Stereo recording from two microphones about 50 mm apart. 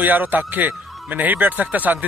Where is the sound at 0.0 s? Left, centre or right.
Right.